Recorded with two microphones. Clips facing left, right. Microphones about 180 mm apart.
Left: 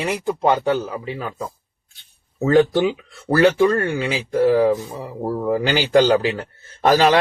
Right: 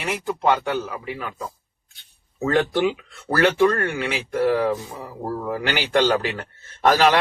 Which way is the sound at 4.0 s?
30° left (ahead or behind).